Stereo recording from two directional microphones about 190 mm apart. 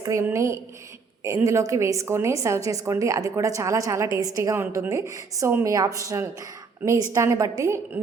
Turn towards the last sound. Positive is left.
turn(degrees=-15)  # may be behind; listen again after turning